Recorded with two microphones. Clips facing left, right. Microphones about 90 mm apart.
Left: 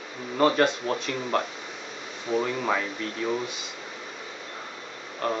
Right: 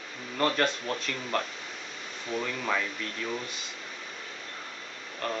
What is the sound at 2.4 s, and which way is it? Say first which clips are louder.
Speech: left 4 dB; 25° left (ahead or behind).